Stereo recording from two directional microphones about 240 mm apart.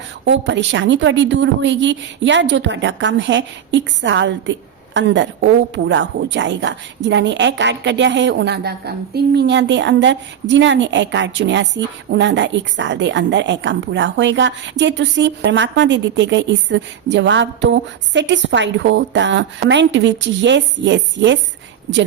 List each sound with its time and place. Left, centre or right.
0.3 s a woman's voice: right